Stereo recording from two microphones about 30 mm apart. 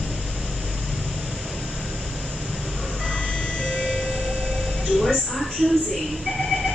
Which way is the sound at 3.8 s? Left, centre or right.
Centre.